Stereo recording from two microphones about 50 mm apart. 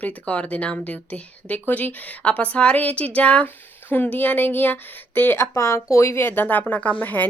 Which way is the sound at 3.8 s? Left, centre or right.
Left.